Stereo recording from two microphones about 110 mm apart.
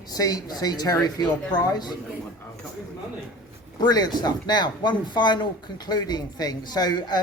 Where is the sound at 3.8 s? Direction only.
40° left (ahead or behind).